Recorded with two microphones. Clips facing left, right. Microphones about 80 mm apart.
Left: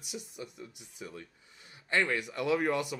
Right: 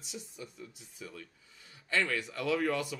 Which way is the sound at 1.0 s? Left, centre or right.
Left.